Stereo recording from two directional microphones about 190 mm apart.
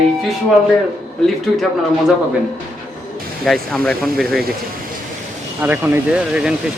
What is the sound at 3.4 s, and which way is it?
Speech, centre (ahead or behind).